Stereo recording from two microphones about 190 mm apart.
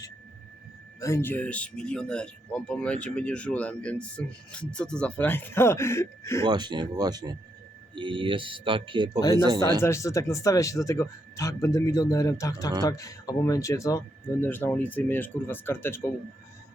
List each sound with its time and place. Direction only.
0.9 s speech: 15° left (ahead or behind)
6.4 s speech: 25° right (ahead or behind)
9.8 s speech: 15° left (ahead or behind)